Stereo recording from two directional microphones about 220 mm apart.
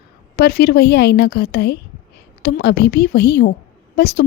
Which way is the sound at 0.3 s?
45° left (ahead or behind).